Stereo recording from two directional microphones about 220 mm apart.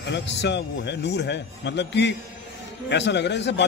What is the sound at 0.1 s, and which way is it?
A man's voice, 50° left (ahead or behind).